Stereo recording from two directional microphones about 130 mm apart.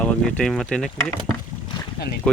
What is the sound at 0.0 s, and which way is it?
Speech, 5° left (ahead or behind).